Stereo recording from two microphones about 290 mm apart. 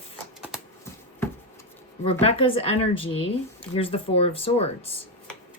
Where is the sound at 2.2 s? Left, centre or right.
Centre.